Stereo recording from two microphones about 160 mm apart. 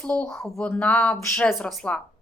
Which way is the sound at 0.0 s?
10° left (ahead or behind).